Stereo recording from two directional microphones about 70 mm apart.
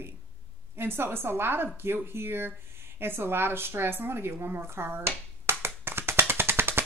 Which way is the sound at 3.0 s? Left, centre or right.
Right.